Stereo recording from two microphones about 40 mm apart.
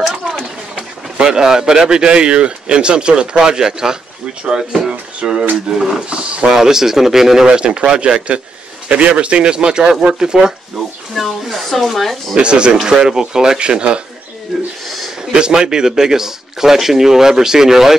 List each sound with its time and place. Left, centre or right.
0.7 s speech: right
6.5 s speech: centre
7.4 s speech: right
11.1 s speech: centre
12.4 s speech: right
15.3 s speech: right